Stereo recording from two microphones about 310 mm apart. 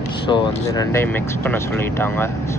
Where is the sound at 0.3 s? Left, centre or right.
Centre.